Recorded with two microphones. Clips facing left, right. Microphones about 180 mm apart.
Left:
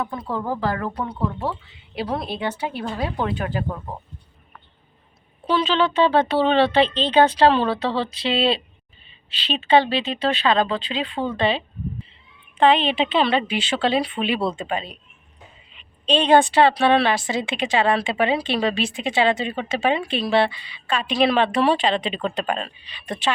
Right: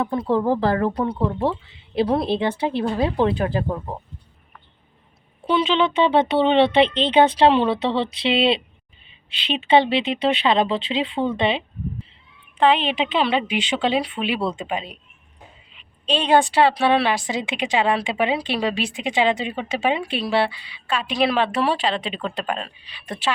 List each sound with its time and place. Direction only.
0.0 s speech: 30° right (ahead or behind)
5.5 s speech: 15° right (ahead or behind)
16.0 s speech: 10° right (ahead or behind)